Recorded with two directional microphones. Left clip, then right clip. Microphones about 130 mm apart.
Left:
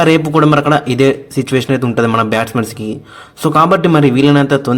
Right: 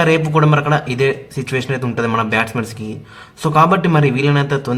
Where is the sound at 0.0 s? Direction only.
45° left (ahead or behind).